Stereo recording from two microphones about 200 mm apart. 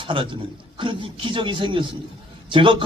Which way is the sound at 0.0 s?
25° right (ahead or behind).